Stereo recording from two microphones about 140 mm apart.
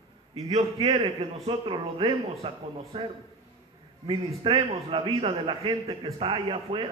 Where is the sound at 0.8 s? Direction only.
40° right (ahead or behind).